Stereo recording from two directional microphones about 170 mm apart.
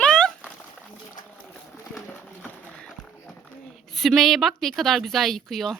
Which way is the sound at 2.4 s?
5° left (ahead or behind).